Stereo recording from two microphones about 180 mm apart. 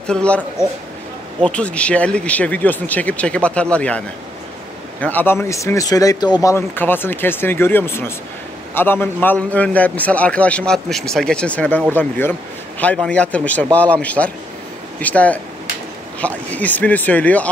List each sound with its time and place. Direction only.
0.0 s a man's voice: 5° left (ahead or behind)
0.6 s a man's voice: 15° left (ahead or behind)
5.0 s a man's voice: 10° left (ahead or behind)